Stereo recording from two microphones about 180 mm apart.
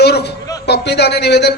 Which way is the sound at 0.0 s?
65° left (ahead or behind).